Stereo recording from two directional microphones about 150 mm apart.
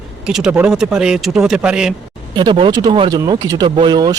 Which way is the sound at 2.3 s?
35° right (ahead or behind).